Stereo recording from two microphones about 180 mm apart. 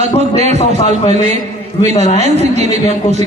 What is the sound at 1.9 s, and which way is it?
Speech, 35° left (ahead or behind).